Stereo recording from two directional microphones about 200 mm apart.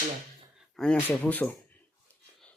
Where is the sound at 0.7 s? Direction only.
5° left (ahead or behind).